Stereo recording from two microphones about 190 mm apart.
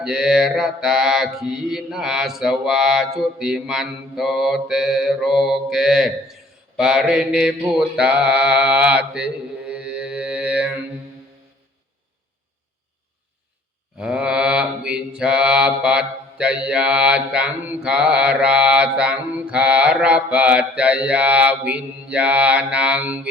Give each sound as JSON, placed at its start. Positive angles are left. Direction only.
{"t": 0.0, "sound": "mantra", "side_deg": -5}
{"t": 14.0, "sound": "mantra", "side_deg": -5}